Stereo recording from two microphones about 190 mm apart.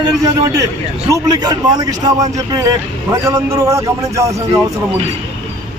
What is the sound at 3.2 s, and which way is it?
Speech, 15° right (ahead or behind).